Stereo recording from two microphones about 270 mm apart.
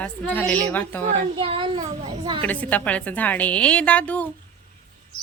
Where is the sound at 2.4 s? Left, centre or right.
Centre.